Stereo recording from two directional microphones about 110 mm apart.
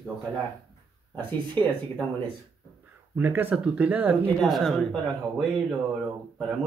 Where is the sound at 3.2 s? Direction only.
15° right (ahead or behind).